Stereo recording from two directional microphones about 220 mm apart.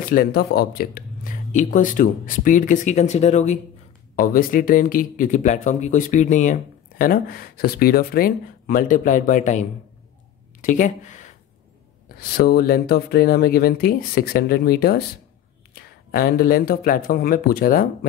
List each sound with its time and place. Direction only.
0.0 s speech: 40° left (ahead or behind)
10.6 s a sound: 35° left (ahead or behind)
12.4 s speech: 45° left (ahead or behind)